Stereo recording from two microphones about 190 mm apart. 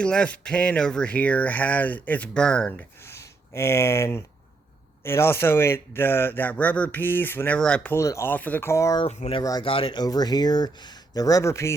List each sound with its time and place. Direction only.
0.0 s speech: 5° left (ahead or behind)
9.0 s speech: 35° left (ahead or behind)
9.4 s speech: 20° left (ahead or behind)